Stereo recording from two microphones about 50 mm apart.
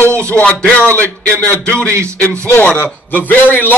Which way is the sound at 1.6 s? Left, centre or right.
Left.